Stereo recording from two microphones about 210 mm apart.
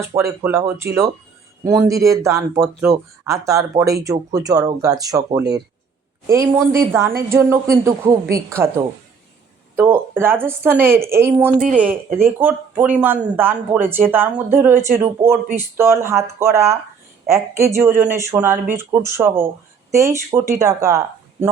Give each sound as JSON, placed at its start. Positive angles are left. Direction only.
{"t": 0.0, "sound": "speech", "side_deg": -15}
{"t": 9.7, "sound": "speech", "side_deg": -10}